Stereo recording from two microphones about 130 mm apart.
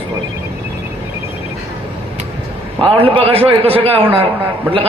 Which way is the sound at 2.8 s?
45° right (ahead or behind).